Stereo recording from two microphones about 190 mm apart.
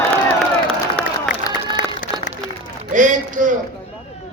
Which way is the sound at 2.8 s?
40° right (ahead or behind).